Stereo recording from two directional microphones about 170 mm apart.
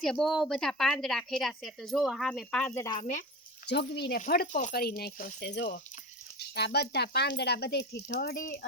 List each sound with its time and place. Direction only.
0.0 s a woman's voice: centre (ahead or behind)
3.7 s speech: 80° left
4.2 s speech: 55° left (ahead or behind)
4.7 s speech: 65° left (ahead or behind); by 5.7 s 90° left
6.5 s speech: 75° left (ahead or behind); by 8.6 s 55° left (ahead or behind)